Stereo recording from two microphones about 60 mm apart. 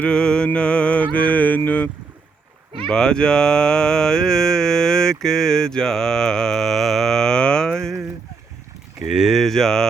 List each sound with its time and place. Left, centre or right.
0.0 s mantra: centre
2.8 s mantra: centre
9.0 s speech: centre
9.4 s mantra: centre